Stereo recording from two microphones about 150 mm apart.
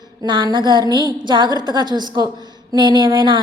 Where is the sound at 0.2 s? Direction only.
30° right (ahead or behind).